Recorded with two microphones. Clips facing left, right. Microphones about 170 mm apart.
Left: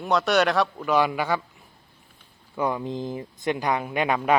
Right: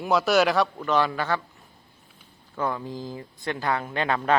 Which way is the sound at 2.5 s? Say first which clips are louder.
Left 3 dB; 15° left (ahead or behind).